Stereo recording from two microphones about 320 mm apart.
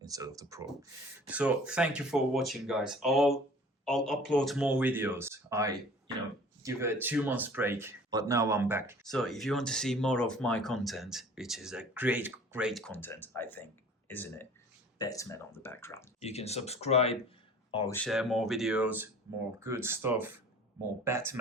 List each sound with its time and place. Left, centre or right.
0.0 s speech: centre
16.2 s speech: centre